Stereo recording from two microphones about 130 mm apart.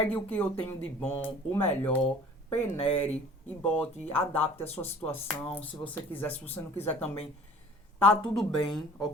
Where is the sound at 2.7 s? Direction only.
50° left (ahead or behind).